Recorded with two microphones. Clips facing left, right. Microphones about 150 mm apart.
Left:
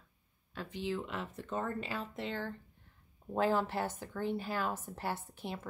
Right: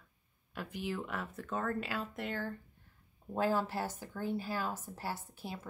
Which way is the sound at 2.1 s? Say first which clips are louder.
Even; 50° right (ahead or behind).